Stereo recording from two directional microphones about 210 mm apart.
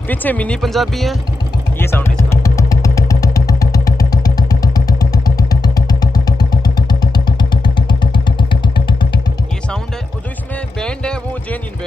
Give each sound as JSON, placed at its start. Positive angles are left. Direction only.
{"t": 0.1, "sound": "speech", "side_deg": 10}
{"t": 1.8, "sound": "vehicle", "side_deg": 10}